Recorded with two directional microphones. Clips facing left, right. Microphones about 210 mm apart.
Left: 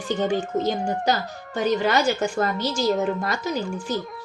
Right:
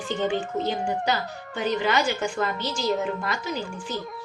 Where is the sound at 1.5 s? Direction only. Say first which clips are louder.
Left 3 dB; 40° left (ahead or behind).